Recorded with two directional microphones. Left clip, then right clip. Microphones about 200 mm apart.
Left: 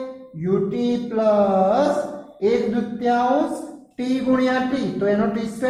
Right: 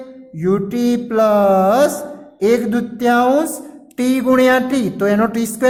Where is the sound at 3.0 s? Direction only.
50° right (ahead or behind).